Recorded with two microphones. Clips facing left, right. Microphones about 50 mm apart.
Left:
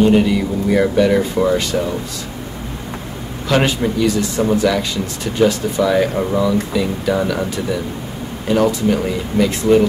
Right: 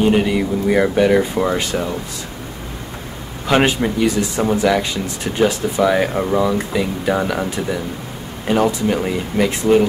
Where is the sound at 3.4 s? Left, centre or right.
Right.